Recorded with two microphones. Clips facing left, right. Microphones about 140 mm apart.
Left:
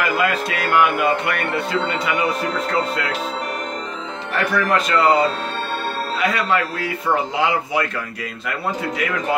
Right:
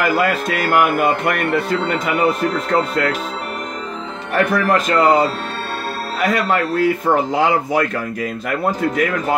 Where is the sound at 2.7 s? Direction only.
50° right (ahead or behind).